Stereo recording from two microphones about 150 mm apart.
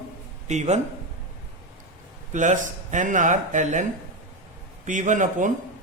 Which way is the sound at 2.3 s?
55° right (ahead or behind).